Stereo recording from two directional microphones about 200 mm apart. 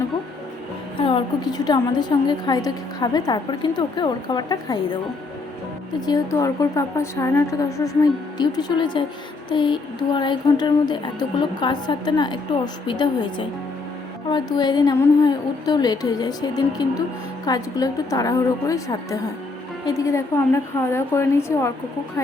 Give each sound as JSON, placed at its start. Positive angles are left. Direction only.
{"t": 0.9, "sound": "a woman's voice", "side_deg": 25}
{"t": 6.1, "sound": "a woman's voice", "side_deg": 15}